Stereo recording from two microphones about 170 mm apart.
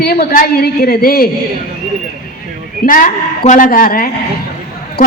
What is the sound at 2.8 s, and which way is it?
A man's voice, 50° left (ahead or behind).